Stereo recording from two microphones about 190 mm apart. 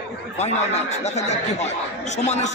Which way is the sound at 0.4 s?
35° left (ahead or behind).